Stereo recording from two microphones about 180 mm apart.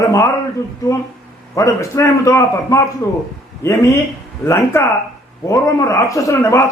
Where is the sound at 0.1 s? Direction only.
15° left (ahead or behind).